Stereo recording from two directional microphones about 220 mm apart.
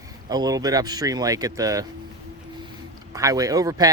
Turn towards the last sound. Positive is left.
turn(degrees=-15)  # may be behind; listen again after turning